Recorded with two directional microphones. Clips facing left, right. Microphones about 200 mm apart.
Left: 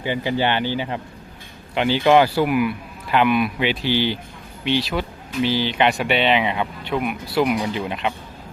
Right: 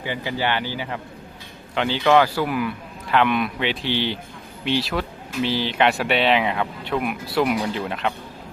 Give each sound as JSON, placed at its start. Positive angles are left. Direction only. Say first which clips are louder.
{"t": 0.0, "sound": "a man's voice", "louder": "left 4 dB", "side_deg": 20}